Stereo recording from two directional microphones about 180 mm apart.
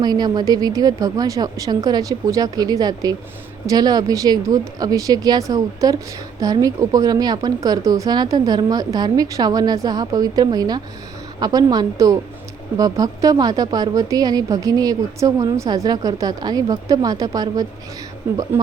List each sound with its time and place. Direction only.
0.0 s a woman's voice: 20° right (ahead or behind)